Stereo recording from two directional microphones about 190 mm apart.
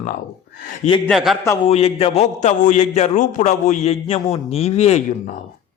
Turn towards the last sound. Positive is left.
turn(degrees=35)  # may be behind; listen again after turning